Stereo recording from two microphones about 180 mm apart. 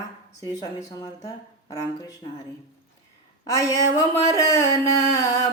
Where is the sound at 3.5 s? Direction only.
20° left (ahead or behind).